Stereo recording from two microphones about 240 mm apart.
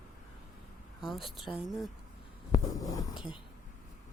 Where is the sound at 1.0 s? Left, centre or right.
Centre.